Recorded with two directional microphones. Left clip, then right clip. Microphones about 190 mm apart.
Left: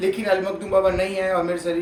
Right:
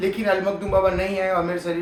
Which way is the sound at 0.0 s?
5° right (ahead or behind).